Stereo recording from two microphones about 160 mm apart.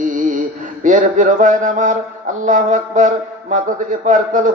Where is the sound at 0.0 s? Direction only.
55° right (ahead or behind).